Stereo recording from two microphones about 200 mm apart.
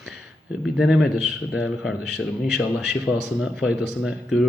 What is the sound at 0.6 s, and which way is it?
A man's voice, centre (ahead or behind).